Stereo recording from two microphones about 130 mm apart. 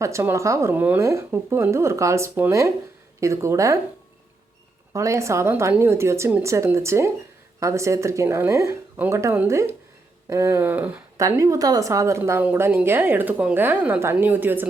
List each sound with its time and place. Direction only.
0.0 s speech: 20° right (ahead or behind)
4.9 s speech: 25° right (ahead or behind)
11.2 s speech: 25° right (ahead or behind)